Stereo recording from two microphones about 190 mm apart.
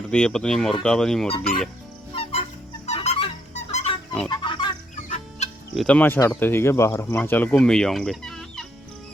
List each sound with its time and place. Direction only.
0.1 s speech: 5° left (ahead or behind)
1.3 s fowl: 30° left (ahead or behind)
2.8 s music: 35° left (ahead or behind)
4.3 s chicken: 25° left (ahead or behind)
5.0 s chicken: 40° left (ahead or behind)
5.7 s speech: 5° left (ahead or behind)